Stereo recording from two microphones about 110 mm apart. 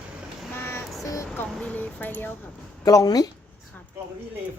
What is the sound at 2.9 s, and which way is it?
Speech, 35° left (ahead or behind).